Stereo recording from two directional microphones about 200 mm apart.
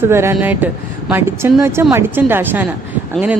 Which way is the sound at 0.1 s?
10° right (ahead or behind).